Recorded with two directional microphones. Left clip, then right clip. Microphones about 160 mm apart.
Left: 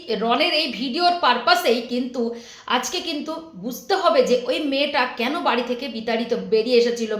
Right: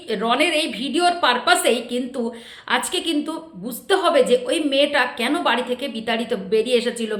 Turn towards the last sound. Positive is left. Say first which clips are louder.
# left 2 dB
turn(degrees=-20)  # may be behind; listen again after turning